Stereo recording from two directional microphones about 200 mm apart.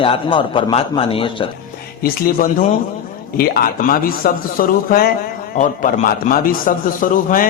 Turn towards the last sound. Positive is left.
turn(degrees=45)  # may be behind; listen again after turning